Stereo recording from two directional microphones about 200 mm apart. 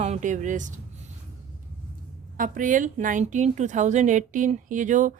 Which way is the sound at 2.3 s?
40° right (ahead or behind).